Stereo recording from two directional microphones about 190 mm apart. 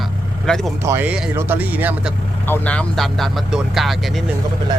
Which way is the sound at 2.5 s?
5° left (ahead or behind).